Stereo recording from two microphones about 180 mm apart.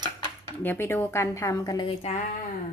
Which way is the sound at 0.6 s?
10° left (ahead or behind).